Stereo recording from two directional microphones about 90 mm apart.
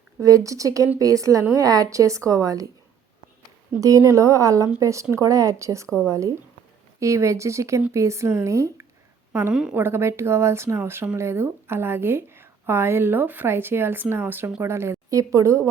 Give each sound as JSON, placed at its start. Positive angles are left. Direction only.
{"t": 0.2, "sound": "a woman's voice", "side_deg": -40}
{"t": 3.8, "sound": "a woman's voice", "side_deg": -40}
{"t": 9.5, "sound": "a woman's voice", "side_deg": -10}
{"t": 9.7, "sound": "a woman's voice", "side_deg": -25}